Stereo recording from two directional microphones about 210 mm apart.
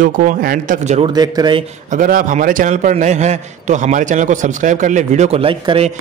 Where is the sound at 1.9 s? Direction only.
40° right (ahead or behind).